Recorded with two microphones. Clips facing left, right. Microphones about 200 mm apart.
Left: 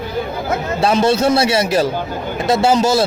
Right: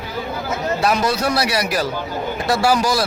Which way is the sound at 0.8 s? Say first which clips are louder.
Left 6 dB; 25° left (ahead or behind).